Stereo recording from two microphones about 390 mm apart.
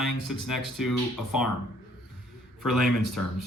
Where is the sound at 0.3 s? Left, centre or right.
Centre.